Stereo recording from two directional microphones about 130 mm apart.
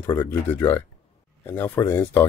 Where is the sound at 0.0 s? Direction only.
20° left (ahead or behind).